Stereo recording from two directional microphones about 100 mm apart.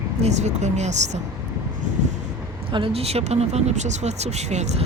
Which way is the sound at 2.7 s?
70° right (ahead or behind).